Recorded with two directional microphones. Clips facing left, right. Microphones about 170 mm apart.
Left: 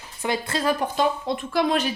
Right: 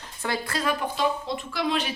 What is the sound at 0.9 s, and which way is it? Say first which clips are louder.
Speech: left 3 dB; 50° left (ahead or behind).